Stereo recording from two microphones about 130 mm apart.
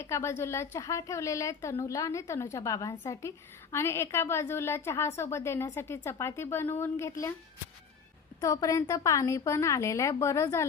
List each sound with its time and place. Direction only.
0.0 s a woman's voice: 20° left (ahead or behind)
8.4 s a woman's voice: 25° left (ahead or behind)